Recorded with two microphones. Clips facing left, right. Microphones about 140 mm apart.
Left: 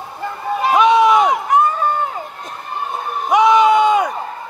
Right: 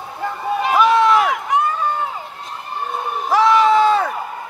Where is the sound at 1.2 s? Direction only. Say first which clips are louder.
Left 4 dB; 40° left (ahead or behind).